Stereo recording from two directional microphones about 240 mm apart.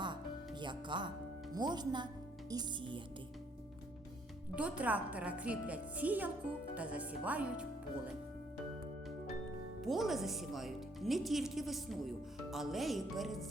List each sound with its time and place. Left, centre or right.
0.6 s a woman's voice: centre
4.5 s a woman's voice: centre
9.8 s speech: centre